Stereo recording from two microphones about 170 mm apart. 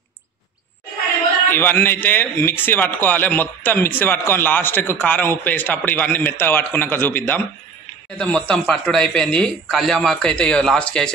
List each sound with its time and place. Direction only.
1.5 s speech: 15° left (ahead or behind)